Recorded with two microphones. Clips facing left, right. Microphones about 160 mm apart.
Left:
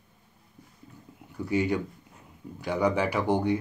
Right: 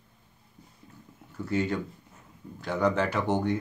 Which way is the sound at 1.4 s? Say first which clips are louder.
Left 2 dB; 15° left (ahead or behind).